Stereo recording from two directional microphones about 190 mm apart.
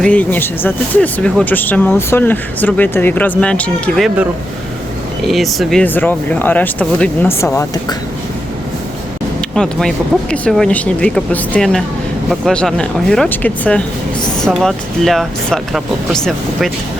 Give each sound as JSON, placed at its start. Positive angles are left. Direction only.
{"t": 0.0, "sound": "speech", "side_deg": 5}
{"t": 9.6, "sound": "speech", "side_deg": 5}